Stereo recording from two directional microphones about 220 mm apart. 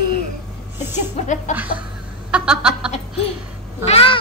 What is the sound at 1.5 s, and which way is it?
Chuckle, 35° left (ahead or behind).